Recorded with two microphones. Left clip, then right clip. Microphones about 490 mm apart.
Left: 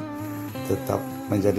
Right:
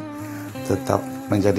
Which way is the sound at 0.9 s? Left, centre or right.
Left.